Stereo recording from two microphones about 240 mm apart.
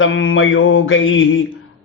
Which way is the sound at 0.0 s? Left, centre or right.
Left.